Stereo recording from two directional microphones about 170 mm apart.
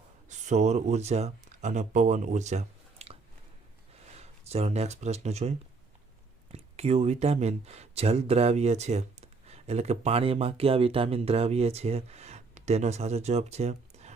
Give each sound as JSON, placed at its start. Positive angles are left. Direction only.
{"t": 0.3, "sound": "speech", "side_deg": -45}